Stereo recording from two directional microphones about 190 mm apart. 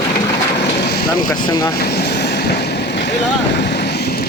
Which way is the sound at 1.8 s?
55° left (ahead or behind).